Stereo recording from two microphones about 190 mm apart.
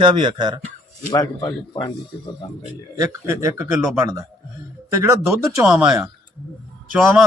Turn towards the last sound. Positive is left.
turn(degrees=-5)  # may be behind; listen again after turning